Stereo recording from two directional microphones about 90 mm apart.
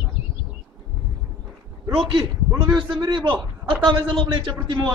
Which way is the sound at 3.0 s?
65° right (ahead or behind).